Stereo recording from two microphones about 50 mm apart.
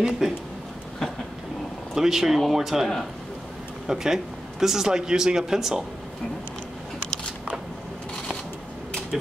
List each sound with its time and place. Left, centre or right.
0.0 s a man's voice: centre
2.0 s a man's voice: centre